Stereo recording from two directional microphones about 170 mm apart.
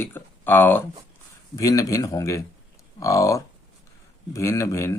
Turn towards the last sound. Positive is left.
turn(degrees=15)  # may be behind; listen again after turning